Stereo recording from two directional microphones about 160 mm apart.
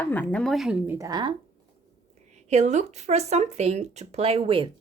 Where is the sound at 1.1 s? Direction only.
25° right (ahead or behind).